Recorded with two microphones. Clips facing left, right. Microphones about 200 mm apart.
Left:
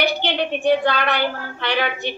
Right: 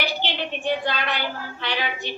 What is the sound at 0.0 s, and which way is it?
A woman's voice, 65° left (ahead or behind).